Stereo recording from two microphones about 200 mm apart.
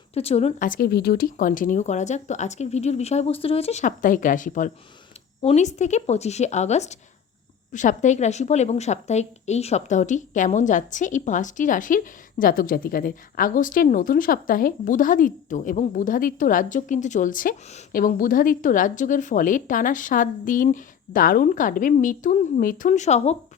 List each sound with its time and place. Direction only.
0.1 s a woman's voice: 30° left (ahead or behind)